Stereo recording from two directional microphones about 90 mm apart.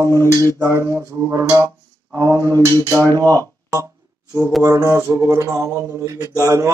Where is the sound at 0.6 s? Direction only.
30° right (ahead or behind).